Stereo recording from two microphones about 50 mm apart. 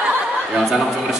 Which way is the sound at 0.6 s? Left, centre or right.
Centre.